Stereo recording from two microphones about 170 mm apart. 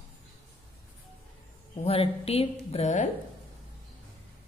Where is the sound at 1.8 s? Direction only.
35° left (ahead or behind).